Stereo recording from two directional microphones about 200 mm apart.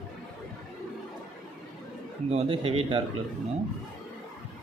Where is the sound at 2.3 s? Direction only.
30° right (ahead or behind).